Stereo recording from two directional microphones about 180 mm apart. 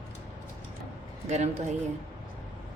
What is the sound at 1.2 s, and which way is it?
Speech, 40° right (ahead or behind).